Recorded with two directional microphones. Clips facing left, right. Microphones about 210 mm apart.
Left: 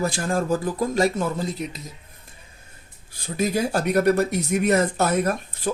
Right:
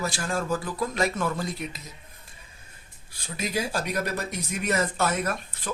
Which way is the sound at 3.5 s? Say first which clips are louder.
Left 6 dB; 60° left (ahead or behind).